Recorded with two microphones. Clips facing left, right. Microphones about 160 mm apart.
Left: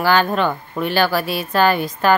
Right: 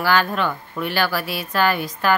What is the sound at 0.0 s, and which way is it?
Speech, 25° left (ahead or behind).